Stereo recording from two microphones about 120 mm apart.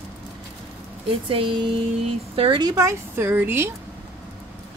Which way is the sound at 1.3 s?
50° right (ahead or behind).